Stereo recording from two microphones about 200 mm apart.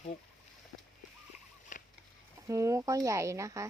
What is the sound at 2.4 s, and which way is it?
Speech, 15° right (ahead or behind).